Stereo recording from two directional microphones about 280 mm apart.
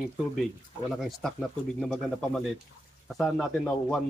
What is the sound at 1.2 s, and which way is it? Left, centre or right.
Speech, centre.